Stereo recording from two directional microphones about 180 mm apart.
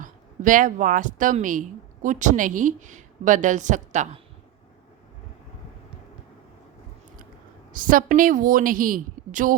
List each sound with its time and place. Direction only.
0.0 s speech: 45° right (ahead or behind)
7.7 s a woman's voice: 50° right (ahead or behind)